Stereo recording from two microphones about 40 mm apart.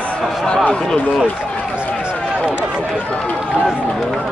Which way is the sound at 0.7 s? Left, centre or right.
Centre.